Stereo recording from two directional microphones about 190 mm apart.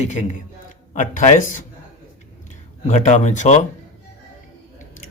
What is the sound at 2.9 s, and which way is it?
Speech, 35° left (ahead or behind).